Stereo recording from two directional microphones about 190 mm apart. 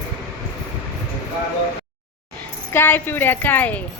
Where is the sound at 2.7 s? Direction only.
10° left (ahead or behind).